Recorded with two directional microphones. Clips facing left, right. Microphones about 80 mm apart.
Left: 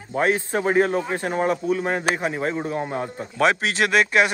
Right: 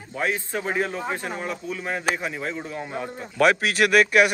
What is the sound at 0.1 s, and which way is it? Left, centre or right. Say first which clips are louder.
A man's voice: left 5 dB; left.